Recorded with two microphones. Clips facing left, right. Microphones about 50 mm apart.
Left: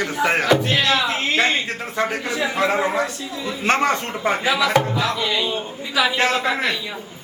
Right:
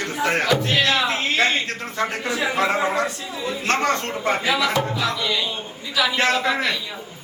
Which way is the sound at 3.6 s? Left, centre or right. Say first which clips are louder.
Left 3 dB; centre.